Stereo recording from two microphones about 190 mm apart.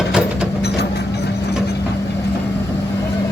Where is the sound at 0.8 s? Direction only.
60° left (ahead or behind).